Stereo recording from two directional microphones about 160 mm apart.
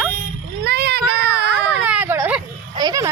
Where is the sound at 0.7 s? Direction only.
90° right.